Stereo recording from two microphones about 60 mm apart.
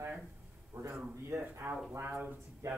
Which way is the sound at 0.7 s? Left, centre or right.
Right.